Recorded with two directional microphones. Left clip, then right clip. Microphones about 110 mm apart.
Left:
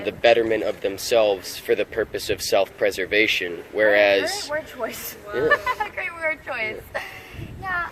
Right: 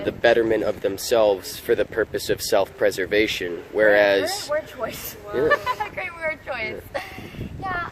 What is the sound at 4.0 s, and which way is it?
Speech, 65° right (ahead or behind).